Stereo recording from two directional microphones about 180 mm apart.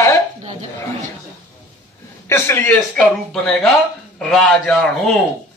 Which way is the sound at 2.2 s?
15° left (ahead or behind).